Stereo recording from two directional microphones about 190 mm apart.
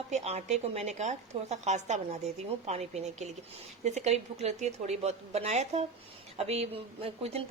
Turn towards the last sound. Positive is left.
turn(degrees=-30)  # may be behind; listen again after turning